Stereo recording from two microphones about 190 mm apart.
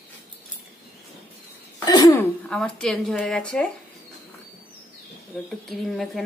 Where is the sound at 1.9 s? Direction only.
20° left (ahead or behind).